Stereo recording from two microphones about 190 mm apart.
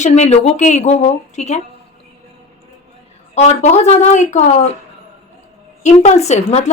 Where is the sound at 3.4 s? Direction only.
35° left (ahead or behind).